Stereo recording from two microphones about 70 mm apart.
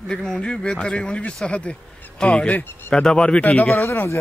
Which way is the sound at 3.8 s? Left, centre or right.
Left.